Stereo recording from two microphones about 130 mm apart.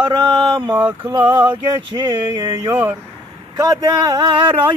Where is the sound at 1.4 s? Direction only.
40° right (ahead or behind).